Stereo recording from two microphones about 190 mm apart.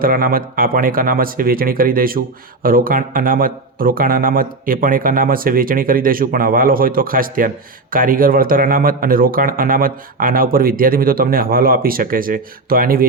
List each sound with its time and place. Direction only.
0.0 s a man's voice: 50° right (ahead or behind)